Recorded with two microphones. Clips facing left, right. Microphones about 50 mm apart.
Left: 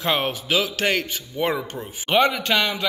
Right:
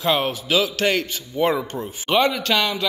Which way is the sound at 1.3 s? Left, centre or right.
Centre.